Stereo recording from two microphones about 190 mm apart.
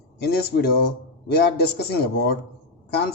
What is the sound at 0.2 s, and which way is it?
Speech, 55° left (ahead or behind).